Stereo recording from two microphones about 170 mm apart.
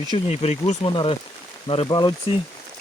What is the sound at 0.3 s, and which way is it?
Speech, 40° left (ahead or behind).